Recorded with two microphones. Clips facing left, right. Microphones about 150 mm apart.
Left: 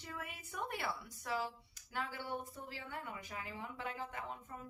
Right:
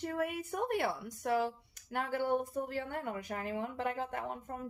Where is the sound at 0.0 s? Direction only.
55° right (ahead or behind).